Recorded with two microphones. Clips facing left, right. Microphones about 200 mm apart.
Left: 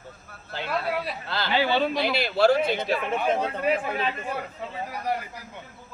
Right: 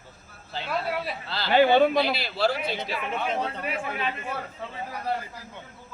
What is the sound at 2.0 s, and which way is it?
Speech, 50° left (ahead or behind).